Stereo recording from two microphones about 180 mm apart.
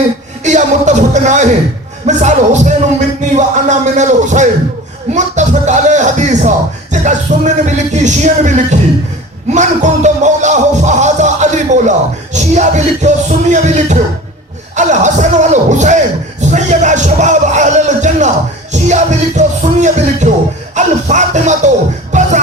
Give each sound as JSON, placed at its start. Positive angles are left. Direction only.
{"t": 0.4, "sound": "music", "side_deg": -40}
{"t": 2.0, "sound": "speech", "side_deg": -40}
{"t": 22.1, "sound": "music", "side_deg": -40}